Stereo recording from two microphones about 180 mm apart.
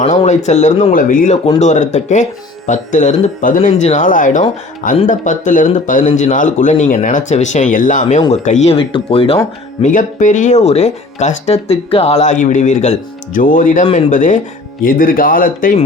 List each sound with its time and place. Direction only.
0.0 s speech: 35° left (ahead or behind)
9.8 s speech: 45° left (ahead or behind)